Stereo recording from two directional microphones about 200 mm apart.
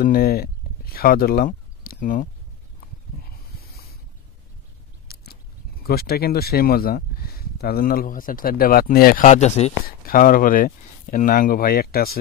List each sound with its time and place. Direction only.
0.0 s speech: 45° left (ahead or behind)
5.0 s scissors: 50° left (ahead or behind)
5.9 s speech: 50° left (ahead or behind); by 9.8 s 35° left (ahead or behind)
9.8 s speech: 45° left (ahead or behind)